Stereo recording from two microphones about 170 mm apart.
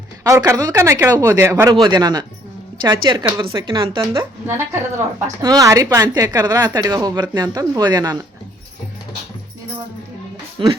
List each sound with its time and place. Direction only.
0.3 s a woman's voice: 15° right (ahead or behind)
4.4 s a woman's voice: 15° right (ahead or behind)
10.6 s a woman's voice: 30° right (ahead or behind)